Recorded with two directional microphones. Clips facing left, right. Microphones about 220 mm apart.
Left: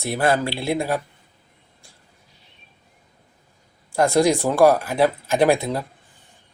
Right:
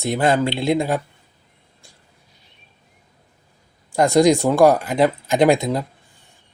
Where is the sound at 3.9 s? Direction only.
15° right (ahead or behind).